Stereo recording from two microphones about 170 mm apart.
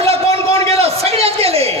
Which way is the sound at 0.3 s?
20° left (ahead or behind).